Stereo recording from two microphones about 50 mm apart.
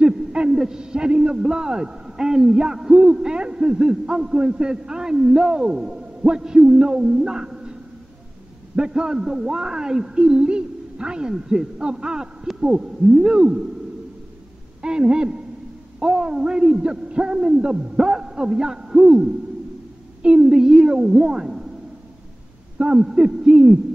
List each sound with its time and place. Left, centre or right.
0.0 s hoot: centre
0.6 s a man's voice: centre
8.7 s a man's voice: centre
14.8 s a man's voice: centre
22.8 s a man's voice: centre